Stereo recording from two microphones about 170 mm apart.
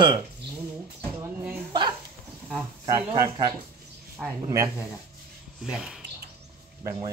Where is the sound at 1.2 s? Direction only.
10° right (ahead or behind).